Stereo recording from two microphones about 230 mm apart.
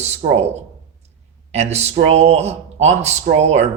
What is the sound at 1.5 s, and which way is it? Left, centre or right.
Speech, right.